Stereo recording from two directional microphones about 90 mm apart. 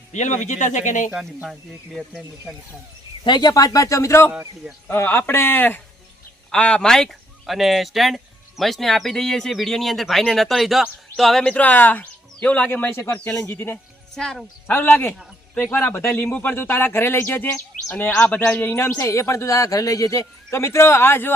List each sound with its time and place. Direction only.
1.5 s speech: centre (ahead or behind)
3.2 s speech: 50° left (ahead or behind); by 4.3 s 35° left (ahead or behind)
4.3 s speech: 10° right (ahead or behind)
4.9 s speech: 30° left (ahead or behind)
13.3 s speech: 30° left (ahead or behind)
14.2 s speech: 5° left (ahead or behind)
14.7 s speech: 25° left (ahead or behind)
18.9 s speech: 35° left (ahead or behind)